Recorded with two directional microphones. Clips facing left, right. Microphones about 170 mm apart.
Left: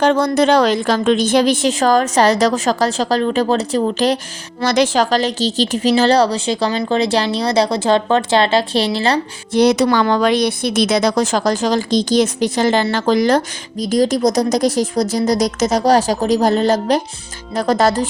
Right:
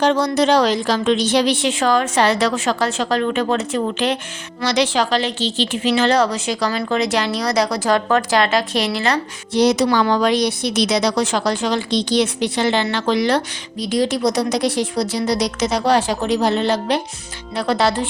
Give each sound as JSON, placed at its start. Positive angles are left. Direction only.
{"t": 0.0, "sound": "a woman's voice", "side_deg": 55}
{"t": 9.5, "sound": "a woman's voice", "side_deg": 55}